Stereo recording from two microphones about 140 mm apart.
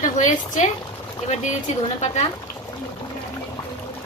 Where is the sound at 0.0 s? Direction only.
65° left (ahead or behind).